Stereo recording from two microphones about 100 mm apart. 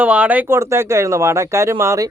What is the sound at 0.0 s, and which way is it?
Speech, 15° right (ahead or behind).